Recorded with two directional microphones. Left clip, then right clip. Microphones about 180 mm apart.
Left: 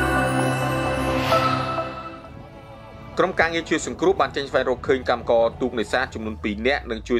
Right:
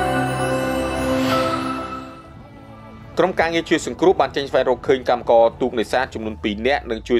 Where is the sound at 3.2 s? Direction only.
30° right (ahead or behind).